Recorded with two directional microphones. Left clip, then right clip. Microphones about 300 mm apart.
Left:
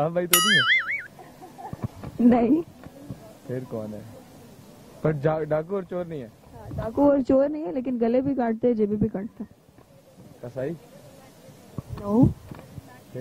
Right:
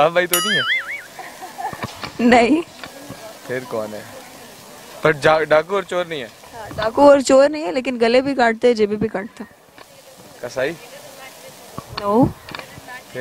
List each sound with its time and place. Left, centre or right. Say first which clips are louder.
0.0 s speech: right 6 dB; centre
1.7 s a sound: right 11 dB; centre
3.4 s speech: right 9 dB; centre
5.0 s speech: right 10 dB; centre
11.9 s speech: right 7 dB; centre